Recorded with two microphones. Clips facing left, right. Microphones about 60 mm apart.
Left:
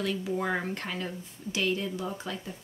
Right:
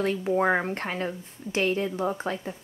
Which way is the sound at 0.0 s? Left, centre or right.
Right.